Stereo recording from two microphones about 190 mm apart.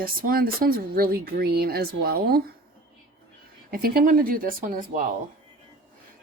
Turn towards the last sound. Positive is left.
turn(degrees=-45)  # may be behind; listen again after turning